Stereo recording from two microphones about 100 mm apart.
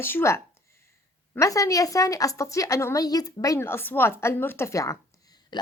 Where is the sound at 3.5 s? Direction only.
25° left (ahead or behind).